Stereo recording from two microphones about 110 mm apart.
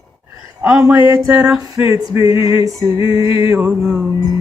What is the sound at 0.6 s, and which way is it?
Music, 20° right (ahead or behind).